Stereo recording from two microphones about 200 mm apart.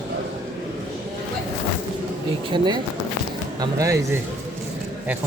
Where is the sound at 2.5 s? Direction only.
20° right (ahead or behind).